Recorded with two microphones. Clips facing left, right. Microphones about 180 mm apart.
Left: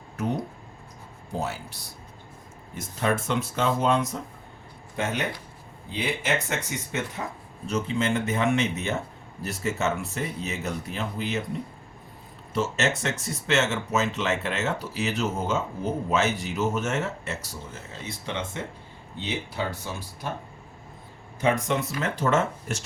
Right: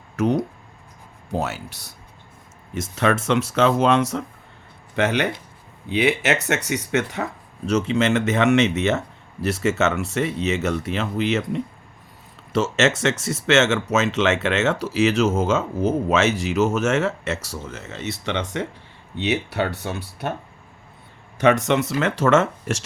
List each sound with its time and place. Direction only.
0.2 s speech: 85° right
1.4 s speech: 70° right (ahead or behind)
2.7 s speech: 90° right; by 20.3 s 65° right (ahead or behind)
21.3 s speech: 75° right (ahead or behind)